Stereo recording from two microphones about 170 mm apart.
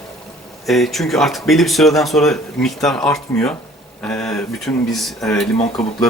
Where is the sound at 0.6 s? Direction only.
Centre (ahead or behind).